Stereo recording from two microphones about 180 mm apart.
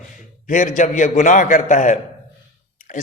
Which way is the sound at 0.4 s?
45° left (ahead or behind).